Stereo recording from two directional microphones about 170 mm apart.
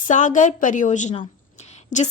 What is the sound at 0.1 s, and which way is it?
A woman's voice, 45° left (ahead or behind).